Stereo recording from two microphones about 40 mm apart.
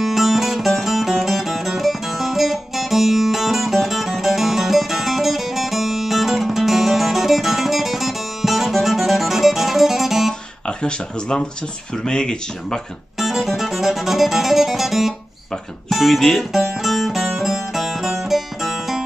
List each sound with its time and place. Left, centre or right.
0.0 s music: centre
10.7 s a sound: left
11.9 s speech: centre
13.2 s music: centre
15.9 s speech: centre
16.7 s music: centre